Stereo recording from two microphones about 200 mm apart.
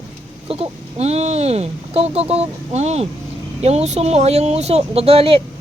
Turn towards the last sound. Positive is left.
turn(degrees=-30)  # may be behind; listen again after turning